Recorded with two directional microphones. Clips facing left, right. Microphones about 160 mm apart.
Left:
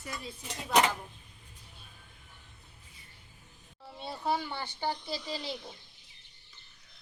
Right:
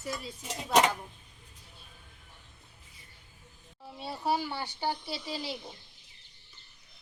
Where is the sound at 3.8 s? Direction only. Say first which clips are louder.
Right 1 dB; 10° right (ahead or behind).